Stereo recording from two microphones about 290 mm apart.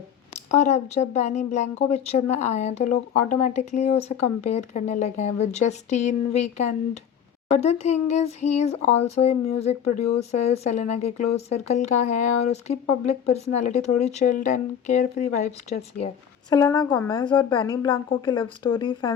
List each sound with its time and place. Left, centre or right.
0.5 s speech: left
16.5 s a woman's voice: centre